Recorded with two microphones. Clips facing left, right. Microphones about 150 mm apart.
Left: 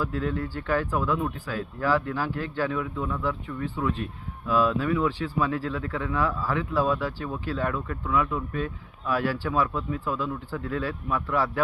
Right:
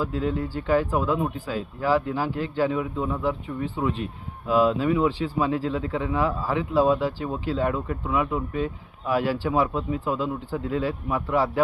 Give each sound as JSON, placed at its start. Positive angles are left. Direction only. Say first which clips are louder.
{"t": 0.0, "sound": "speech", "louder": "right 2 dB", "side_deg": -15}